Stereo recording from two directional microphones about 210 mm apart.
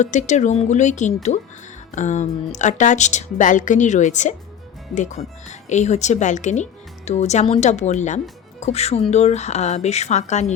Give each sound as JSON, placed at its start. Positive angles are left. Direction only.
{"t": 0.0, "sound": "speech", "side_deg": 35}